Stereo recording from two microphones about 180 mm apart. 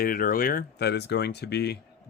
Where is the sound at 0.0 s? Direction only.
55° left (ahead or behind).